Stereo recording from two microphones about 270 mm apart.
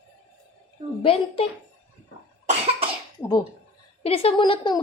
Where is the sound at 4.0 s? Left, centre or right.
Left.